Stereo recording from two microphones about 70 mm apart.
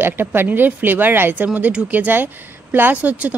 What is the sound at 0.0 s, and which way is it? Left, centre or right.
A woman's voice, right.